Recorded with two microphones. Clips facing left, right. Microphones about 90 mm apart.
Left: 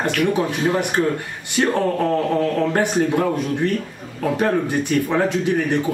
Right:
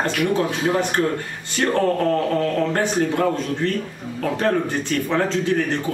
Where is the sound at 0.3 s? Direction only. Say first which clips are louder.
Left 1 dB; 15° left (ahead or behind).